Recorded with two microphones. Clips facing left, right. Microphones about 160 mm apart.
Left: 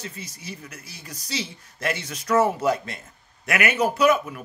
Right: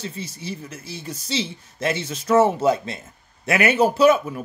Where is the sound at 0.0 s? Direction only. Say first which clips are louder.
Right 6 dB; 30° right (ahead or behind).